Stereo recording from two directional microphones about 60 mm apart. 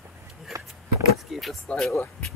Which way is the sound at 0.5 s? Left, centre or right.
Right.